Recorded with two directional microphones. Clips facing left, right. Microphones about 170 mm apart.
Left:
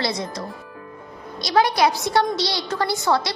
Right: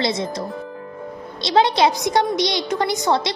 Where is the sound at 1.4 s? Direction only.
25° right (ahead or behind).